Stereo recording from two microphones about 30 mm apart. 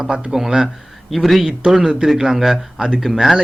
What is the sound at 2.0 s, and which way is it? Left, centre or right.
Speech, centre.